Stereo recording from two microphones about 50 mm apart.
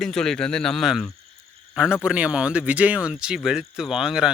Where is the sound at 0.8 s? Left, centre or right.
Centre; by 3.1 s right.